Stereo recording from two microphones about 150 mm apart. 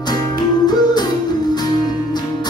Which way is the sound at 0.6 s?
25° left (ahead or behind).